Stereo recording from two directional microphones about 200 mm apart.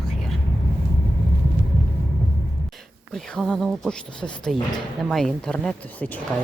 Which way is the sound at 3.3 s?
Centre (ahead or behind).